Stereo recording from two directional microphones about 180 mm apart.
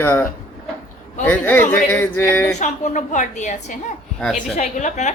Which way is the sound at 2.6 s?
45° left (ahead or behind).